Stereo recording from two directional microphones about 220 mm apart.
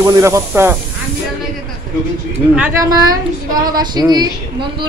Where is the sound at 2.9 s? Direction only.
15° right (ahead or behind).